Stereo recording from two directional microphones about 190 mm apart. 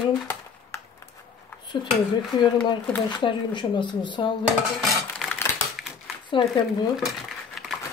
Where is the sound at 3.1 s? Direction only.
25° left (ahead or behind).